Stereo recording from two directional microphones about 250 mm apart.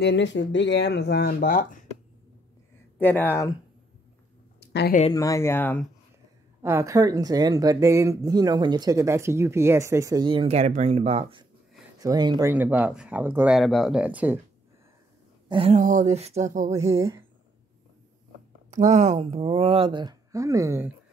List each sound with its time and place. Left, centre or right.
0.0 s speech: left
3.0 s speech: centre
4.6 s a sound: left
5.1 s speech: centre
6.6 s speech: centre
15.4 s speech: right
16.7 s speech: centre
18.7 s speech: right; by 20.9 s centre